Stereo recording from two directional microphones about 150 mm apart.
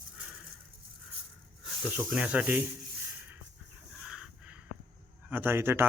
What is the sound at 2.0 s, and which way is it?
Speech, 5° right (ahead or behind).